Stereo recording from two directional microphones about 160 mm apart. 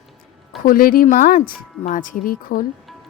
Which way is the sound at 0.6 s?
65° left (ahead or behind).